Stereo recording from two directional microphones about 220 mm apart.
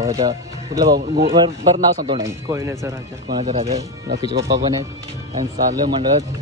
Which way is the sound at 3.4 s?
25° right (ahead or behind).